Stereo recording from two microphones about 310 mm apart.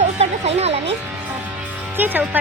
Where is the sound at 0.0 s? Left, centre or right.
Right.